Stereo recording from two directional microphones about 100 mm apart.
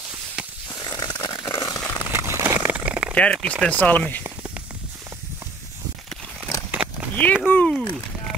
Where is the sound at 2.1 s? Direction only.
25° right (ahead or behind).